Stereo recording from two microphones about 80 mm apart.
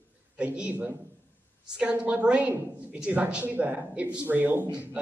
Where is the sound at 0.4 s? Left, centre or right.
Centre.